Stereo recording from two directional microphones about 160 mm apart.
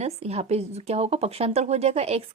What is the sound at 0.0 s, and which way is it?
A woman's voice, 40° right (ahead or behind).